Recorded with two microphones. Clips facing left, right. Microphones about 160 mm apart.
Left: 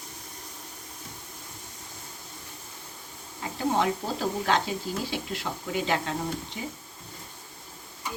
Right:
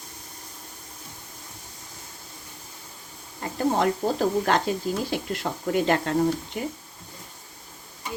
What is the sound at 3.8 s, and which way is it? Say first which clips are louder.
Speech: right 5 dB; 45° right (ahead or behind).